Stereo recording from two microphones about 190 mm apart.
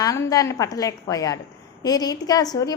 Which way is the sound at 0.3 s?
20° left (ahead or behind).